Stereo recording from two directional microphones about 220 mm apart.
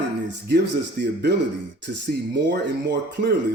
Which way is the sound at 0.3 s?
50° right (ahead or behind).